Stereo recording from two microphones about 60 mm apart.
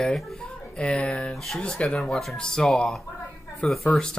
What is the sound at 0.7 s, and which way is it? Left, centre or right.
Speech, centre.